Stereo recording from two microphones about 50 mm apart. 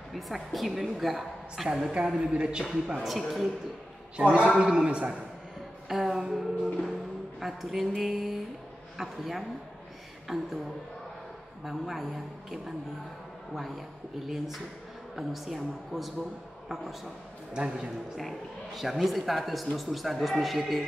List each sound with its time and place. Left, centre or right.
0.1 s speech: centre
2.1 s a man's voice: centre
3.0 s speech: centre
4.2 s a man's voice: right
5.9 s music: centre
8.9 s speech: centre
11.6 s a man's voice: centre
18.8 s speech: centre